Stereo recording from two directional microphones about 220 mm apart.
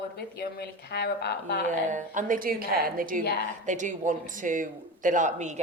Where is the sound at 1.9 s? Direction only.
35° right (ahead or behind).